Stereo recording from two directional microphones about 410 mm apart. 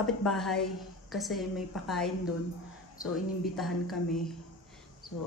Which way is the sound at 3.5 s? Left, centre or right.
Centre.